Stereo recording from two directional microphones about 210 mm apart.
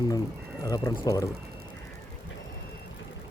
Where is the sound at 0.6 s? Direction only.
20° left (ahead or behind).